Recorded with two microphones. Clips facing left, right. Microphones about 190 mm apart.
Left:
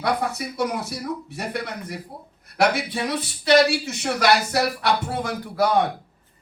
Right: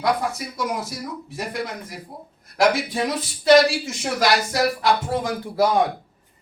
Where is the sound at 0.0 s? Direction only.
60° left (ahead or behind).